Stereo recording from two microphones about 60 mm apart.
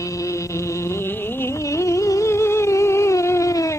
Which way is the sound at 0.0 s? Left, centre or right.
Left.